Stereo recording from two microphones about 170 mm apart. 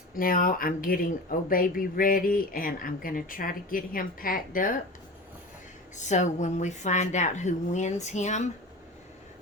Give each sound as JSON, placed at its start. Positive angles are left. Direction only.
{"t": 0.1, "sound": "speech", "side_deg": 55}
{"t": 6.0, "sound": "a woman's voice", "side_deg": 45}